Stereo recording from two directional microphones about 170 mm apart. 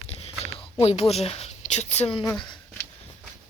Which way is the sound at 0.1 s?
35° left (ahead or behind).